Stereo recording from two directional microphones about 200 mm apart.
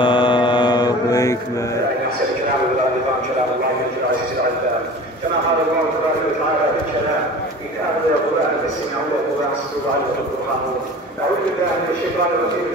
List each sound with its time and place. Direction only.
0.0 s mantra: 25° left (ahead or behind)